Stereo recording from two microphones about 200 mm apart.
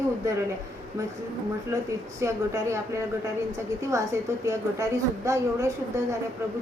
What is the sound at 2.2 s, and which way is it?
Speech, 15° right (ahead or behind).